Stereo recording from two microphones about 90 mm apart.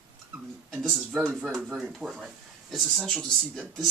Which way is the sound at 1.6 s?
15° right (ahead or behind).